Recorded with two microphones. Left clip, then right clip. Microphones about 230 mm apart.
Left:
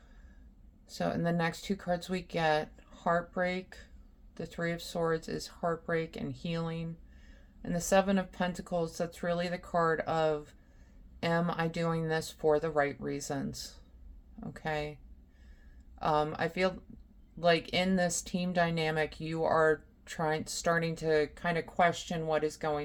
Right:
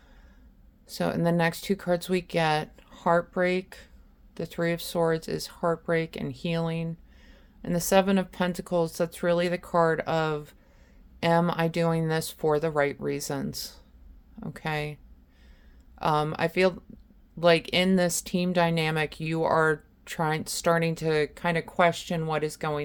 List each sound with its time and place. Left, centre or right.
0.9 s speech: right
16.0 s speech: right